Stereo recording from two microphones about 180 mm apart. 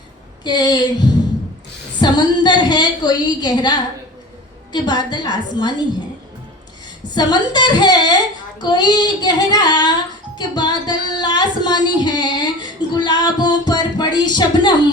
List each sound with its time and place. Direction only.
0.4 s a woman's voice: 25° left (ahead or behind)
7.1 s a woman's voice: 25° left (ahead or behind)
8.6 s child singing: 20° left (ahead or behind)